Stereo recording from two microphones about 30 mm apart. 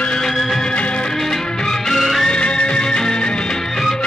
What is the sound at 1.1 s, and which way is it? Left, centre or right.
Music, centre.